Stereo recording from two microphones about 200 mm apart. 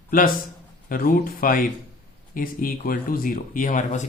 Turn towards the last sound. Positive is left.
turn(degrees=40)  # may be behind; listen again after turning